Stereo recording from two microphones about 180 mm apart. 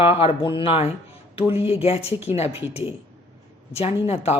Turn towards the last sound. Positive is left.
turn(degrees=35)  # may be behind; listen again after turning